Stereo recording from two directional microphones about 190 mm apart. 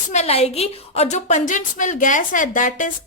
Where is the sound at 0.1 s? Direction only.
35° left (ahead or behind).